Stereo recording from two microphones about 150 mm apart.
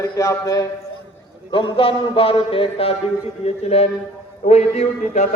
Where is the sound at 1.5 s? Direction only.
35° left (ahead or behind).